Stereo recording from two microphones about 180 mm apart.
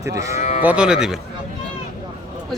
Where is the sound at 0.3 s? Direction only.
40° left (ahead or behind).